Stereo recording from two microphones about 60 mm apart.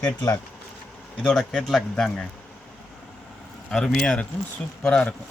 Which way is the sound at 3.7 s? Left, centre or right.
Centre.